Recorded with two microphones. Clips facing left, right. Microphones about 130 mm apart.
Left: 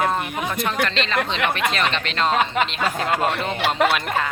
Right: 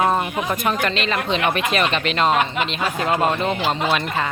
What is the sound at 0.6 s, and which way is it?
Speech, 10° right (ahead or behind).